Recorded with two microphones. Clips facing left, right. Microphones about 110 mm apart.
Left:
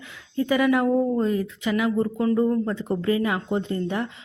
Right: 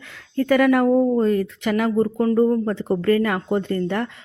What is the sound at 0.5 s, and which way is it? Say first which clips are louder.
Speech: right 4 dB; 60° right (ahead or behind).